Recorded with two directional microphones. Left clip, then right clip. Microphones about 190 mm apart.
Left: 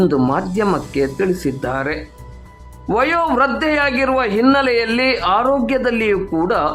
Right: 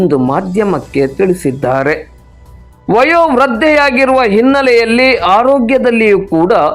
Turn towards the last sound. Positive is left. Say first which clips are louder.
# right 8 dB
turn(degrees=-15)  # may be behind; listen again after turning